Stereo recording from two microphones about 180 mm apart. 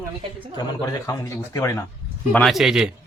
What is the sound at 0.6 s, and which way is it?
A man's voice, 20° left (ahead or behind).